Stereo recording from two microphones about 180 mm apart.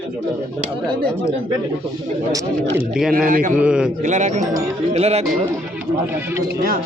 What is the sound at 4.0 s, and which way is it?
Speech, 45° right (ahead or behind).